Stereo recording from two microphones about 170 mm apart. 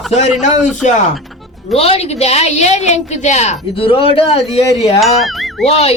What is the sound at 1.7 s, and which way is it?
A woman's voice, 35° left (ahead or behind).